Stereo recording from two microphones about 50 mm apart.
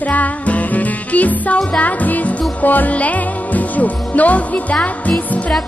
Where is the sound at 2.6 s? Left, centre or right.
Left.